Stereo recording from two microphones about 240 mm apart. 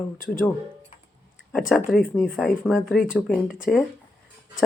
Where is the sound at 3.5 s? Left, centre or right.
Left.